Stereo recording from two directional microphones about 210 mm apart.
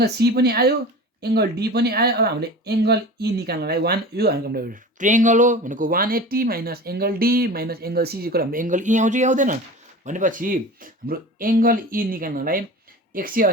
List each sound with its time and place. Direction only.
0.0 s speech: 50° right (ahead or behind)